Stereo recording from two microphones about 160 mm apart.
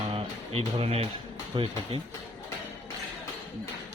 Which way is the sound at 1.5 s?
30° right (ahead or behind).